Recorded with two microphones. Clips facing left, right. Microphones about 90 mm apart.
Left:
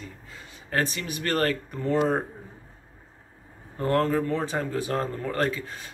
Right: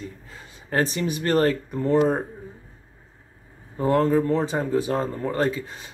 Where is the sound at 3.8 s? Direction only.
15° right (ahead or behind).